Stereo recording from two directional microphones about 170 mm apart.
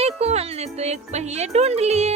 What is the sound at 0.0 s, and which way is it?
Speech, 40° right (ahead or behind).